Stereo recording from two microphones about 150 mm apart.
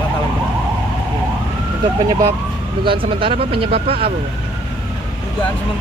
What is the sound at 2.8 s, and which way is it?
Speech, 35° right (ahead or behind).